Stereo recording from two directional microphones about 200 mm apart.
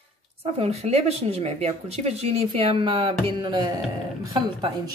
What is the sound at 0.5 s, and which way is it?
Speech, 30° right (ahead or behind).